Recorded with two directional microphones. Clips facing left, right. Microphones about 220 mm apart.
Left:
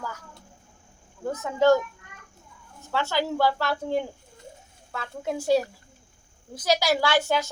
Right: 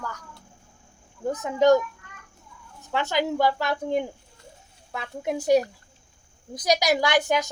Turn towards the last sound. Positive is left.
turn(degrees=-15)  # may be behind; listen again after turning